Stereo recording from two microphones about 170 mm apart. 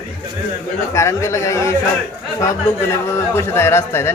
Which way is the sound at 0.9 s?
15° left (ahead or behind).